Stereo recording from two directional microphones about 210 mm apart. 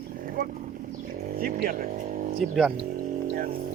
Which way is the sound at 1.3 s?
45° right (ahead or behind).